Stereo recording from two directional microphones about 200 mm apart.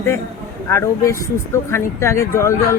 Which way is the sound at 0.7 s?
15° left (ahead or behind).